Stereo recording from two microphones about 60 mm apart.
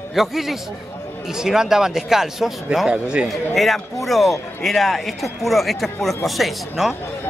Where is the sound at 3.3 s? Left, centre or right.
Centre.